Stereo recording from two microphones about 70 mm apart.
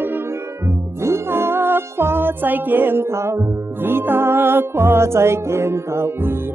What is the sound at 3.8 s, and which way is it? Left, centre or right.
Music, right.